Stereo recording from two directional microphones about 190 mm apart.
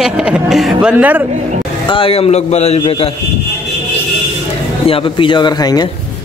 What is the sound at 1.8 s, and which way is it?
A man's voice, 30° left (ahead or behind).